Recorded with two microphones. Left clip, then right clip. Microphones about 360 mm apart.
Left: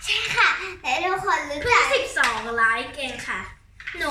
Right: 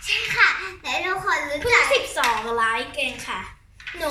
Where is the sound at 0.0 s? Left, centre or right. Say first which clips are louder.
Right 1 dB; centre.